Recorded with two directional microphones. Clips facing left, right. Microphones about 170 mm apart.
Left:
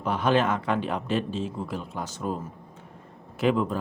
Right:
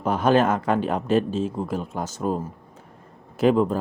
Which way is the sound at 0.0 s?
45° right (ahead or behind).